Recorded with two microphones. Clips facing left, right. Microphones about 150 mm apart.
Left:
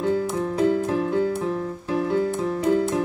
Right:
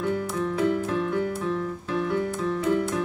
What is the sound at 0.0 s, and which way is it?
Music, 30° left (ahead or behind).